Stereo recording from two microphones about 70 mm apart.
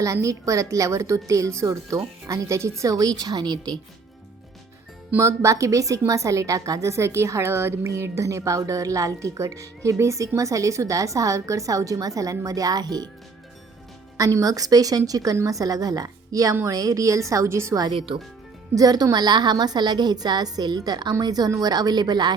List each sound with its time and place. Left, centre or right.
0.0 s a woman's voice: right
5.2 s a woman's voice: right
14.2 s a woman's voice: right
18.7 s speech: right
19.1 s a woman's voice: right